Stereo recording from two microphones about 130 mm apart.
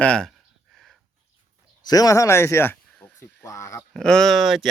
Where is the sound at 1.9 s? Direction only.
25° left (ahead or behind).